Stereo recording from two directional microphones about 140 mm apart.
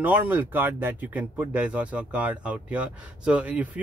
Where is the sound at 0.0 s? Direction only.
10° right (ahead or behind).